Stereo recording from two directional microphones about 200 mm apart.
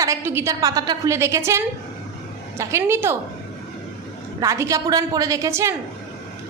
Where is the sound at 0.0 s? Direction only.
15° right (ahead or behind).